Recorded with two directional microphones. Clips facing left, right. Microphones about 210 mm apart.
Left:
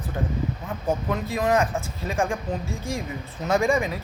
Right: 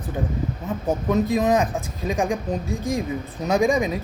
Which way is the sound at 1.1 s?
20° right (ahead or behind).